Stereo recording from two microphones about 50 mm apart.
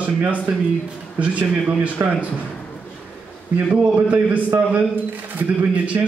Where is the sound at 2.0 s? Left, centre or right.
Right.